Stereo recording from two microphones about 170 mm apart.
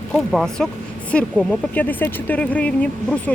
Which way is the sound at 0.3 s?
Centre (ahead or behind).